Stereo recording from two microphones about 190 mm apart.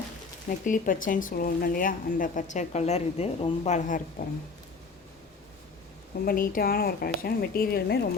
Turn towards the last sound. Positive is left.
turn(degrees=55)  # may be behind; listen again after turning